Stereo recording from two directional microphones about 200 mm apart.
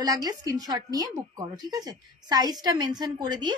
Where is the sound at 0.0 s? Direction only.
20° right (ahead or behind).